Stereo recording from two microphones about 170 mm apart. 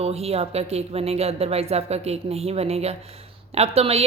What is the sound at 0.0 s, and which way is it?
Speech, 35° right (ahead or behind).